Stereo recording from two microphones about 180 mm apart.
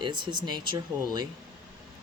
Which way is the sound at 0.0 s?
25° right (ahead or behind).